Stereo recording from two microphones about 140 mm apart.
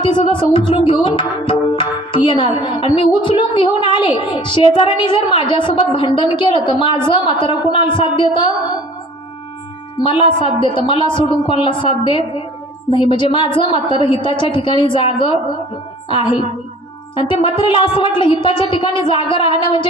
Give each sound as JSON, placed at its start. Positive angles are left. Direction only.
{"t": 0.0, "sound": "music", "side_deg": 35}
{"t": 10.0, "sound": "music", "side_deg": 40}